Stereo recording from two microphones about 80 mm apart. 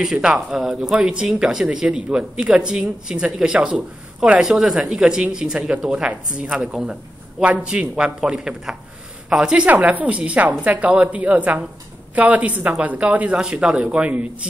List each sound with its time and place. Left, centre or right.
0.0 s speech: centre